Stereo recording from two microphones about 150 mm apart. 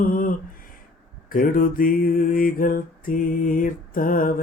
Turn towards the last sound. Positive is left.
turn(degrees=65)  # may be behind; listen again after turning